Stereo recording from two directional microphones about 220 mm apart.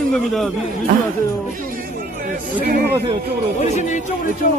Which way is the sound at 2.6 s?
45° right (ahead or behind).